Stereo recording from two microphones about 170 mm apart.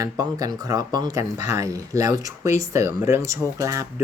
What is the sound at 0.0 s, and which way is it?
Speech, 20° right (ahead or behind).